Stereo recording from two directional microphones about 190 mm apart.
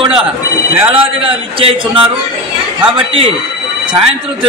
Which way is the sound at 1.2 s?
30° right (ahead or behind).